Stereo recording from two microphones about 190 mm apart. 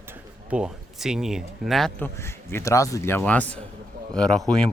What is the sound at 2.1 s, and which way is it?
A man's voice, 15° left (ahead or behind).